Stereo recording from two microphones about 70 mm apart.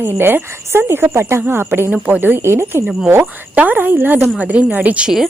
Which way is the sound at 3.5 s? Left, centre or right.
Right.